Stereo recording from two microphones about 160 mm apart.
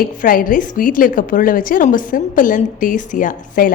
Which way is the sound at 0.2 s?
60° left (ahead or behind).